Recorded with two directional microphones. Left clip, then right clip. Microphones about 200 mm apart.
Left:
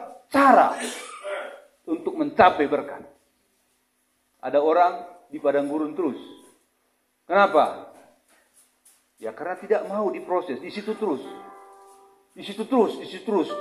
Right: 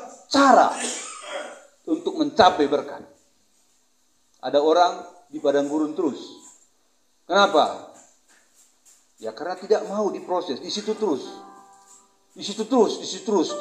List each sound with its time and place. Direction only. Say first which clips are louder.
0.3 s a man's voice: right 1 dB; 25° right (ahead or behind)
1.9 s a man's voice: right 2 dB; 25° right (ahead or behind)
4.4 s a man's voice: right 1 dB; 25° right (ahead or behind)
7.2 s a man's voice: even; 25° right (ahead or behind)
9.2 s a man's voice: right 1 dB; 30° right (ahead or behind)
13.3 s speech: right 2 dB; 40° right (ahead or behind)